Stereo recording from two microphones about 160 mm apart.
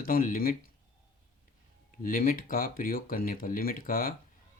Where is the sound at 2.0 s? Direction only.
60° left (ahead or behind).